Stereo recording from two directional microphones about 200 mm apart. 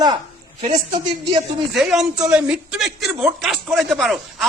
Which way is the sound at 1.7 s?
Centre (ahead or behind).